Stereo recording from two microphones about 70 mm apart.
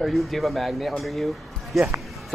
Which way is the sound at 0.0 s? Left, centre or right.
Centre.